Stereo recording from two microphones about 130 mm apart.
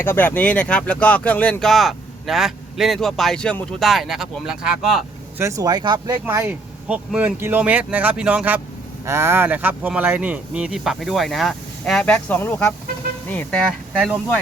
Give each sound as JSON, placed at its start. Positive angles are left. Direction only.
{"t": 0.0, "sound": "speech", "side_deg": 15}
{"t": 5.4, "sound": "speech", "side_deg": -25}
{"t": 6.2, "sound": "speech", "side_deg": -20}